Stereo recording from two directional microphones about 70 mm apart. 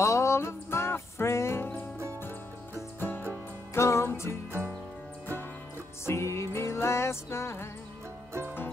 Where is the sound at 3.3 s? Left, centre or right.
Left.